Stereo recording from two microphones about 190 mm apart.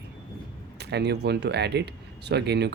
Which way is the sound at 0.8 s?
60° right (ahead or behind).